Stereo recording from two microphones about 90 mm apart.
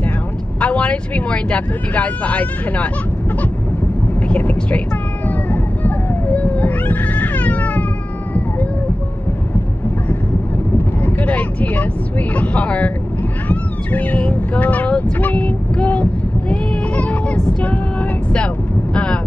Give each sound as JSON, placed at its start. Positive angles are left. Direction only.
{"t": 0.6, "sound": "speech", "side_deg": 15}
{"t": 4.3, "sound": "speech", "side_deg": 15}
{"t": 5.3, "sound": "cat", "side_deg": 20}
{"t": 11.1, "sound": "speech", "side_deg": 20}
{"t": 13.5, "sound": "cat", "side_deg": 20}